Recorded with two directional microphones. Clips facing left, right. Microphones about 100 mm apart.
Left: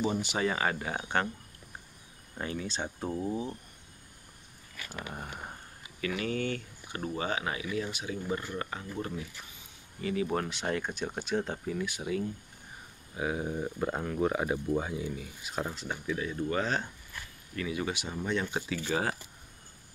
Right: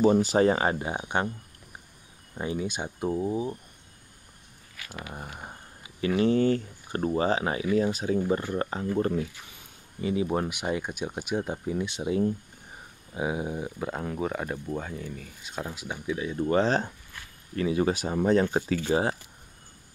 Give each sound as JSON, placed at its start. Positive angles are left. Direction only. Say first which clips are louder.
{"t": 0.0, "sound": "speech", "louder": "right 10 dB", "side_deg": -40}
{"t": 2.3, "sound": "speech", "louder": "right 5 dB", "side_deg": -15}
{"t": 4.9, "sound": "speech", "louder": "right 1 dB", "side_deg": -5}
{"t": 5.9, "sound": "speech", "louder": "right 9 dB", "side_deg": -30}
{"t": 10.0, "sound": "speech", "louder": "right 4 dB", "side_deg": -20}
{"t": 15.7, "sound": "speech", "louder": "right 2 dB", "side_deg": -10}
{"t": 16.4, "sound": "speech", "louder": "right 9 dB", "side_deg": -35}